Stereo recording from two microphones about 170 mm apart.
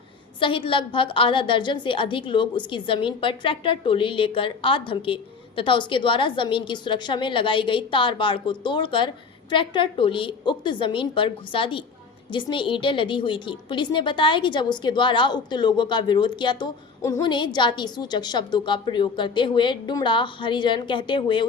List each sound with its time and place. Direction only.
0.3 s a woman's voice: 30° left (ahead or behind)